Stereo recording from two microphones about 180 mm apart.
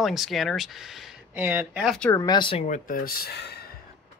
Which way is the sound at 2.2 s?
25° left (ahead or behind).